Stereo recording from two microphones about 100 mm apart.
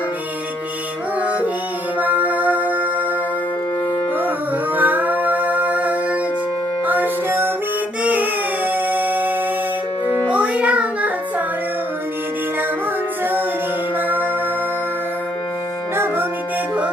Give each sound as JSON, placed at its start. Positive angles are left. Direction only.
{"t": 1.2, "sound": "music", "side_deg": -15}
{"t": 4.8, "sound": "music", "side_deg": -15}